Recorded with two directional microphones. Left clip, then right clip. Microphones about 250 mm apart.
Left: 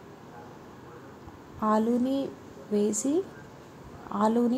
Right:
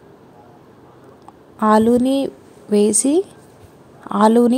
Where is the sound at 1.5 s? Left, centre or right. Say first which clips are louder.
Right 12 dB; right.